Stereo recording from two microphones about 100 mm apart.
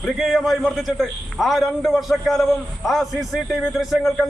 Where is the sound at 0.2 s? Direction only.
Centre (ahead or behind).